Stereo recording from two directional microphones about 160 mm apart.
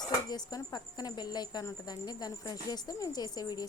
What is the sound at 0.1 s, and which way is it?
Speech, 25° left (ahead or behind).